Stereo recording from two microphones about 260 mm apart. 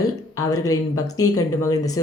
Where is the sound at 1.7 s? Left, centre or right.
Centre.